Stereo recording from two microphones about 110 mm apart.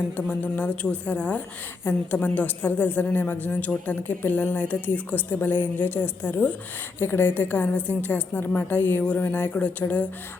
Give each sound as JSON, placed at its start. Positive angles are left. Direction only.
{"t": 0.2, "sound": "a woman's voice", "side_deg": 15}